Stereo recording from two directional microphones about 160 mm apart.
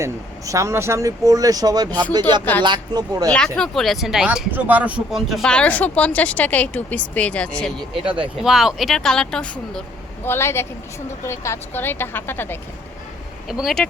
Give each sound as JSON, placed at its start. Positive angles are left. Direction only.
{"t": 0.0, "sound": "speech", "side_deg": -20}
{"t": 2.4, "sound": "speech", "side_deg": 10}
{"t": 2.6, "sound": "speech", "side_deg": -25}
{"t": 3.3, "sound": "speech", "side_deg": 5}
{"t": 8.4, "sound": "speech", "side_deg": -5}
{"t": 10.2, "sound": "speech", "side_deg": 15}
{"t": 13.5, "sound": "speech", "side_deg": 0}